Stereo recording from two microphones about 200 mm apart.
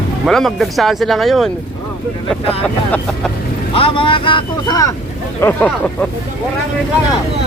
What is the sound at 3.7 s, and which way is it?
Speech, 25° left (ahead or behind).